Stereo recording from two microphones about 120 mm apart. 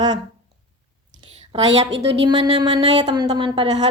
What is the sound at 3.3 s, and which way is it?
Speech, 45° right (ahead or behind).